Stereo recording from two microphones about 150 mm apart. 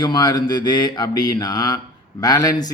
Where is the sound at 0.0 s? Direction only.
25° left (ahead or behind).